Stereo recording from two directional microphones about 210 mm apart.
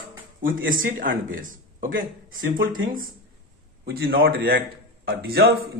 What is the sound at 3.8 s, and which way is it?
Speech, 65° right (ahead or behind).